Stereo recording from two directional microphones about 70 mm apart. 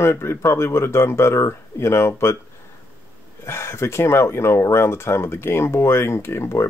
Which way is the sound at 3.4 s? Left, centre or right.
Left.